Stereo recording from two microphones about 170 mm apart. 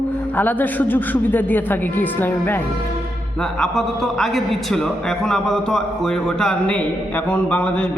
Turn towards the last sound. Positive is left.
turn(degrees=5)  # may be behind; listen again after turning